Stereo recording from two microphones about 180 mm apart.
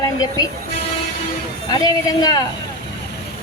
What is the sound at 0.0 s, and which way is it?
Vehicle, 20° left (ahead or behind).